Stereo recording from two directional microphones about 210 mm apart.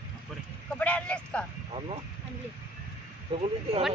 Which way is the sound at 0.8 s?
5° left (ahead or behind).